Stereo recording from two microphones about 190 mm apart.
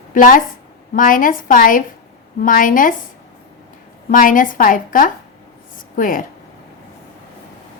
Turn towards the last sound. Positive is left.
turn(degrees=45)  # may be behind; listen again after turning